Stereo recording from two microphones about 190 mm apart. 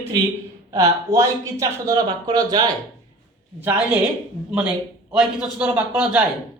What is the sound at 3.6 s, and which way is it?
Speech, 10° right (ahead or behind).